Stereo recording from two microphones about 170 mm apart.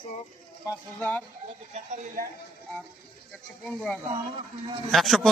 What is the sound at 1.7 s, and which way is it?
Speech, 45° right (ahead or behind).